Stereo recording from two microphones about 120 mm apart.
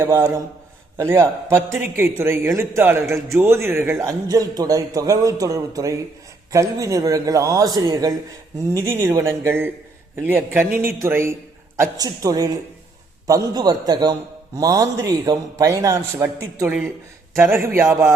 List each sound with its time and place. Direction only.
0.0 s a man's voice: 25° right (ahead or behind)